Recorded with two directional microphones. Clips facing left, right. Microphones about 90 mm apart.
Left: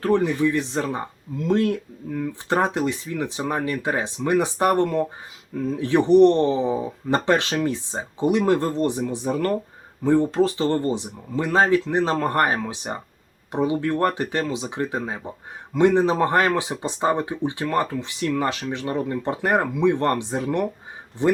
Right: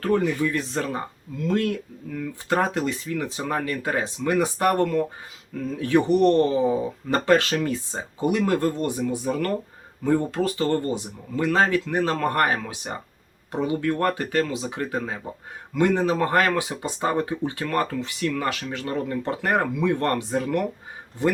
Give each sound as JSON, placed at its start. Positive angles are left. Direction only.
{"t": 0.0, "sound": "speech", "side_deg": 20}